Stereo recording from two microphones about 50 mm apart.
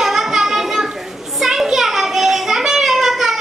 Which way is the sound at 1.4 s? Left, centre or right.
Centre.